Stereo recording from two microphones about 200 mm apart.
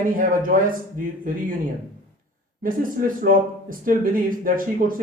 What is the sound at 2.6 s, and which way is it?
Speech, 45° right (ahead or behind).